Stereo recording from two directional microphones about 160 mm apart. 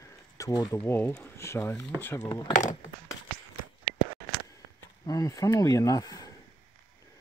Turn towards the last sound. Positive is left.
turn(degrees=25)  # may be behind; listen again after turning